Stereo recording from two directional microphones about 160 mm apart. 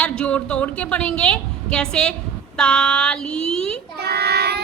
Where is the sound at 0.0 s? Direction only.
5° left (ahead or behind).